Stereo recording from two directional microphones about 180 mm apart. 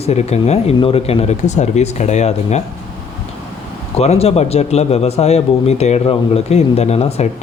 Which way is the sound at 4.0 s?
35° left (ahead or behind).